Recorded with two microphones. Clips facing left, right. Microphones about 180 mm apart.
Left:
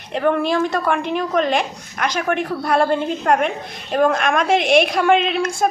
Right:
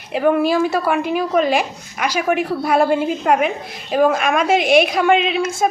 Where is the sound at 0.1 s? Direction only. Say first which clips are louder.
Right 2 dB; 5° right (ahead or behind).